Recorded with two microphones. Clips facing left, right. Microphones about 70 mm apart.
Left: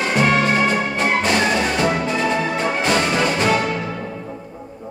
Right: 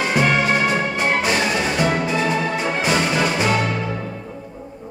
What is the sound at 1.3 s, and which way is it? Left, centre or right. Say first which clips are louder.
Music: left 2 dB; centre.